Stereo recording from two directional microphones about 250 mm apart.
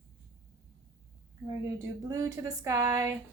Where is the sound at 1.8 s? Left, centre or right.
Centre.